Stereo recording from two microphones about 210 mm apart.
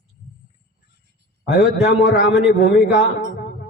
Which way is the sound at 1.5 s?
50° left (ahead or behind).